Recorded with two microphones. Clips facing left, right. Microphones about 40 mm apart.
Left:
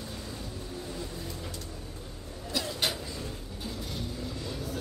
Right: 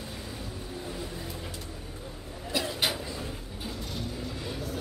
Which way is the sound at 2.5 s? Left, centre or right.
Centre.